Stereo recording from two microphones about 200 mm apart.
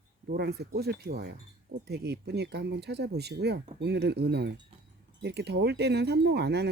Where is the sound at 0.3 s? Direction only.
50° right (ahead or behind).